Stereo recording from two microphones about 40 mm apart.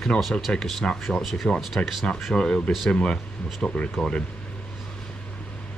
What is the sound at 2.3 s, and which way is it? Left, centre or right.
Speech, left.